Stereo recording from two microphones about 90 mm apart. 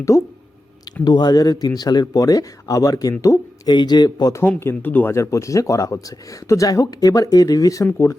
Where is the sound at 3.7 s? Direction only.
50° left (ahead or behind).